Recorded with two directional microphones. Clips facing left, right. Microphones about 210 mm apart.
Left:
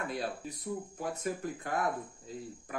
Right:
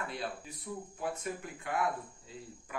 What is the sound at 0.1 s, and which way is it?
Speech, 40° left (ahead or behind).